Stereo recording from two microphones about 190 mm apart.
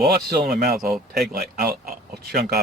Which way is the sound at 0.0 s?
55° right (ahead or behind).